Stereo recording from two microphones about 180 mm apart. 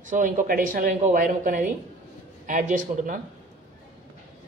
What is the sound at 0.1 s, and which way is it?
Speech, 45° right (ahead or behind).